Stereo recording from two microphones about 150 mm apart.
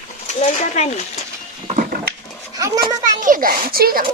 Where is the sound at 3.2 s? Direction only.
70° right (ahead or behind).